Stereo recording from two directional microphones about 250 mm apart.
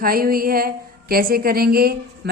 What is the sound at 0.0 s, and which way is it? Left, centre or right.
Speech, right.